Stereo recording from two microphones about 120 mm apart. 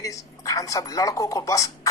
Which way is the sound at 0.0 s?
30° left (ahead or behind).